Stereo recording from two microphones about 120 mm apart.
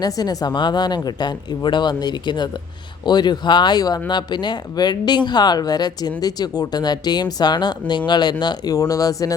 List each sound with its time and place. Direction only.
0.0 s speech: 35° left (ahead or behind)